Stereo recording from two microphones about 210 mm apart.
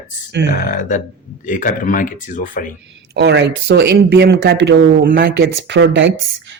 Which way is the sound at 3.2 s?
55° right (ahead or behind).